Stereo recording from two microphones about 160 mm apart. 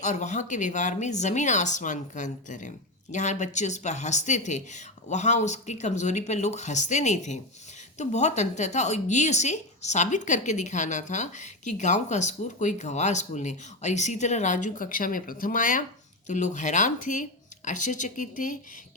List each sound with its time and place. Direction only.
0.0 s a woman's voice: 50° left (ahead or behind)